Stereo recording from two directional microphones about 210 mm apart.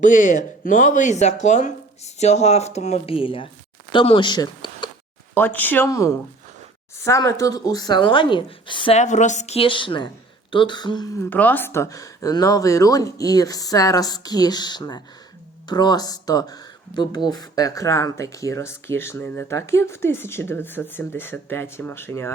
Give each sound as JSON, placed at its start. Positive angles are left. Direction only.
{"t": 0.0, "sound": "speech", "side_deg": 35}
{"t": 5.3, "sound": "speech", "side_deg": 10}